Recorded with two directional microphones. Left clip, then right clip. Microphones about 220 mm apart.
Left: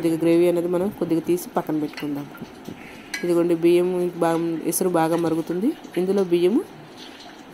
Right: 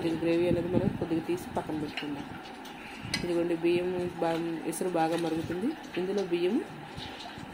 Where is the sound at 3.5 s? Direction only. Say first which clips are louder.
Left 11 dB; 40° left (ahead or behind).